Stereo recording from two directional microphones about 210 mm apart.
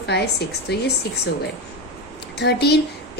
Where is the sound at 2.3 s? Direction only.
50° left (ahead or behind).